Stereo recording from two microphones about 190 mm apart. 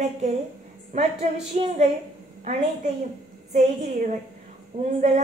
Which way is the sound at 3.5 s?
40° right (ahead or behind).